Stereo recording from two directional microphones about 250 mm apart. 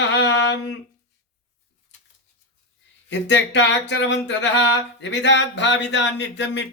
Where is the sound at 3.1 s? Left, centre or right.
Left.